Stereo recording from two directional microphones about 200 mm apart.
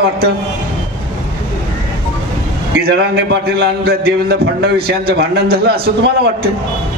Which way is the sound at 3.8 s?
50° right (ahead or behind).